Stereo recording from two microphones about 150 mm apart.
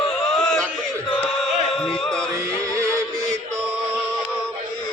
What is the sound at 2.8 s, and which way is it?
Music, 20° right (ahead or behind).